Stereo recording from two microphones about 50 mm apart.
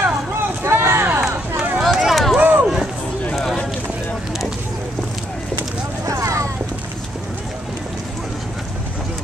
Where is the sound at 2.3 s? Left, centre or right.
Right.